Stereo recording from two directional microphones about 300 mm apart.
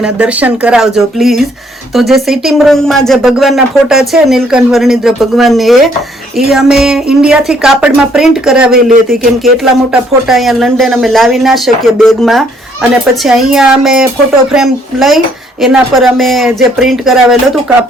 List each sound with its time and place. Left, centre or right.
0.0 s speech: centre
8.7 s speech: right
9.9 s speech: centre